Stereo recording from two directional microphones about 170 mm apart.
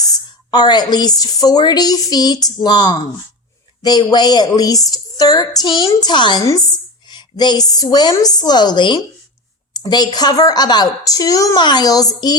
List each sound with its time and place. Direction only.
0.0 s a woman's voice: 25° left (ahead or behind)